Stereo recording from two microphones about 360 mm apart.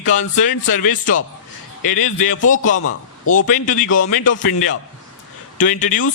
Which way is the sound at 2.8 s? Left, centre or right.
Left.